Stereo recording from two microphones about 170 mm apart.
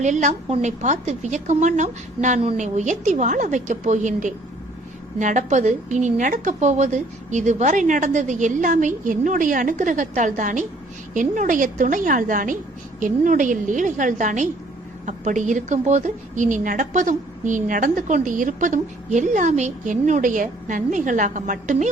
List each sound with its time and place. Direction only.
0.0 s a woman's voice: 45° right (ahead or behind)